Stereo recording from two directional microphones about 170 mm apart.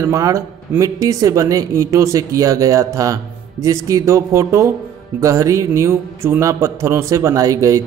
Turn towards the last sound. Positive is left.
turn(degrees=-20)  # may be behind; listen again after turning